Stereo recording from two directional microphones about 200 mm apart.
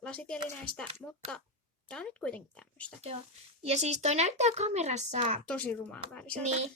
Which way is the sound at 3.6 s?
35° right (ahead or behind).